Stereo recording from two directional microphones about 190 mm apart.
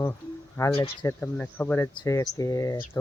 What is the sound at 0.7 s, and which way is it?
Speech, 30° left (ahead or behind).